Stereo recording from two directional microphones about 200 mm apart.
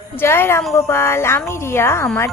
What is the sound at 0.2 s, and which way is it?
Speech, 10° left (ahead or behind).